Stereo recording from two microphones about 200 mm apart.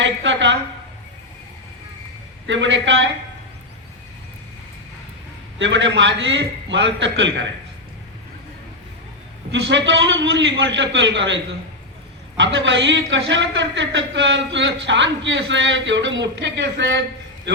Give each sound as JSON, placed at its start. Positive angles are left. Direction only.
{"t": 0.2, "sound": "a woman's voice", "side_deg": -65}
{"t": 2.5, "sound": "a man's voice", "side_deg": -65}
{"t": 5.5, "sound": "a man's voice", "side_deg": -65}
{"t": 9.5, "sound": "speech", "side_deg": -65}
{"t": 12.4, "sound": "speech", "side_deg": -70}